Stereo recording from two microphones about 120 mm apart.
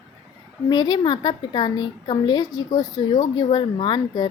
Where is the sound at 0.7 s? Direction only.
35° left (ahead or behind).